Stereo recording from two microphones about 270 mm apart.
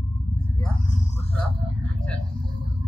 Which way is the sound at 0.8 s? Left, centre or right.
Left.